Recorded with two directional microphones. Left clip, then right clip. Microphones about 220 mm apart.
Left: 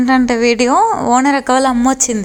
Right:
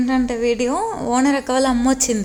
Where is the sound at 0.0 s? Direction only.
20° left (ahead or behind).